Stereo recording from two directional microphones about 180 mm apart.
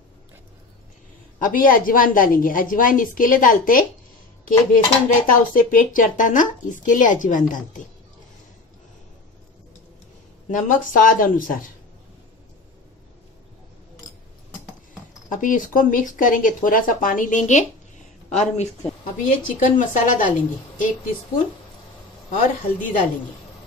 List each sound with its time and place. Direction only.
1.4 s speech: 50° left (ahead or behind)
10.5 s speech: 45° left (ahead or behind)
15.2 s speech: 45° left (ahead or behind)
22.3 s speech: 45° left (ahead or behind)